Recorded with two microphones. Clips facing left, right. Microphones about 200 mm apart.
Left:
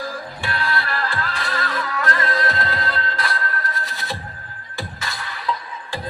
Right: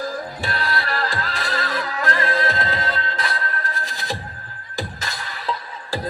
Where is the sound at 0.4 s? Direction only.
35° right (ahead or behind).